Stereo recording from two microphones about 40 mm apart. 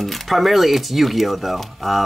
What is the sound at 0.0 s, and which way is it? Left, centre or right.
Speech, centre.